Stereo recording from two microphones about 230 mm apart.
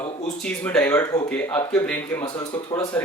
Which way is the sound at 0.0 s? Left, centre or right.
Centre.